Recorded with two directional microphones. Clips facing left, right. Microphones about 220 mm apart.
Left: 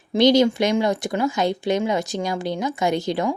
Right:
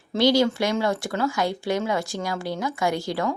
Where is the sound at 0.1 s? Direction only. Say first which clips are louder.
Left 4 dB; 20° left (ahead or behind).